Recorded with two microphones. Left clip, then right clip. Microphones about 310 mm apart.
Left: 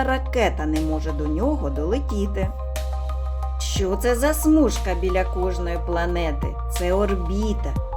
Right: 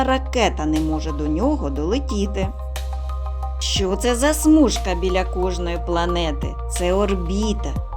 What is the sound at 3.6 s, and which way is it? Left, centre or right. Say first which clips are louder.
Speech: right 3 dB; centre.